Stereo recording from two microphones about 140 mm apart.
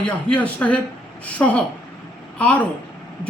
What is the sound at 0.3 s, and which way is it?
A man's voice, 10° left (ahead or behind).